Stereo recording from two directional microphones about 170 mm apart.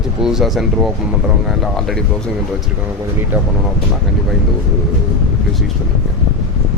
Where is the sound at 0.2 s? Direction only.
Centre (ahead or behind).